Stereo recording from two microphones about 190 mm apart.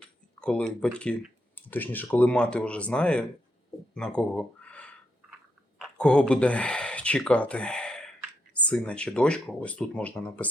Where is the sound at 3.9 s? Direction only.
5° left (ahead or behind).